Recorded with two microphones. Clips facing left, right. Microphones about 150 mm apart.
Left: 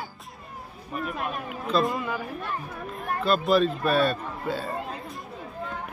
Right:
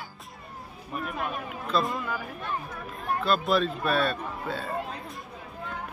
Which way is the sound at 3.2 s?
Centre (ahead or behind).